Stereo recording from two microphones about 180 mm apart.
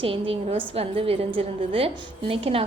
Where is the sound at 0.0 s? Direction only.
30° right (ahead or behind).